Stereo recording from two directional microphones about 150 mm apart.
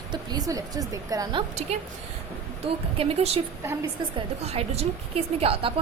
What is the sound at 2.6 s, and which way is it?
Speech, 40° right (ahead or behind).